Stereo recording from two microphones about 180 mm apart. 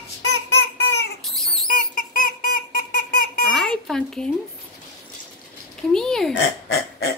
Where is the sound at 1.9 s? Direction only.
50° left (ahead or behind).